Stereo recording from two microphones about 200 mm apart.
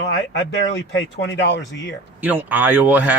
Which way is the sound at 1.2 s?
60° left (ahead or behind).